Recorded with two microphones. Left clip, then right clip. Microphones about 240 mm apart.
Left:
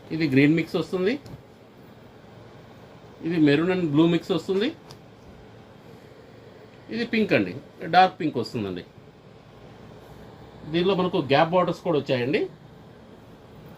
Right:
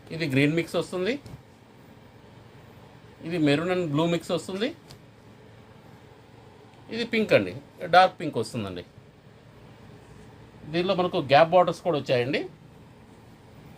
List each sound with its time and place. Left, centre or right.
0.1 s speech: right
3.2 s speech: right
6.9 s speech: right
10.7 s speech: right